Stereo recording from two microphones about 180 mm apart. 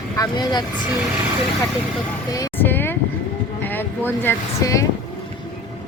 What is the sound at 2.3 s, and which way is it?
Vehicle, 20° left (ahead or behind).